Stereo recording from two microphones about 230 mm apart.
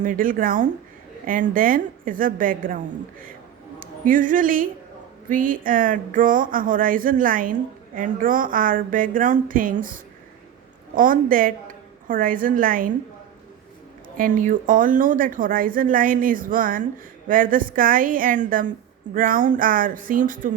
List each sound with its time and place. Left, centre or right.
0.0 s speech: right
3.8 s a woman's voice: right
14.2 s speech: right